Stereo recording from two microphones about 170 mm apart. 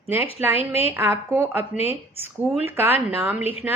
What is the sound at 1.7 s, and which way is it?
Speech, 35° left (ahead or behind).